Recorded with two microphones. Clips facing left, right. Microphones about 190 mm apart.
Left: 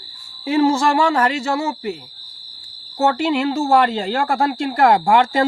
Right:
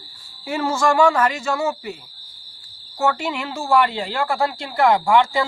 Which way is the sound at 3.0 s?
40° left (ahead or behind).